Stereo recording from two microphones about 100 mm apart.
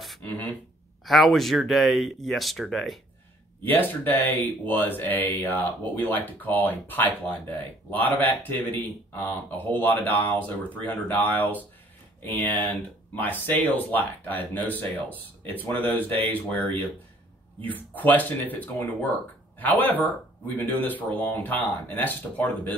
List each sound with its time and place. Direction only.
0.2 s a sound: 15° left (ahead or behind)
1.0 s speech: centre (ahead or behind)
3.6 s speech: 20° left (ahead or behind)